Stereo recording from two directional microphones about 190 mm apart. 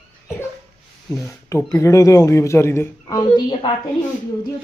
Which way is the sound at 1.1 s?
15° left (ahead or behind).